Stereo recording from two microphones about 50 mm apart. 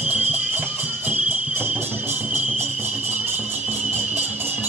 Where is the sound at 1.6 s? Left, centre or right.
Right.